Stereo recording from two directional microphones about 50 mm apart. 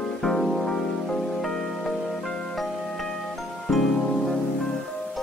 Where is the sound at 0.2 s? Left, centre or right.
Centre.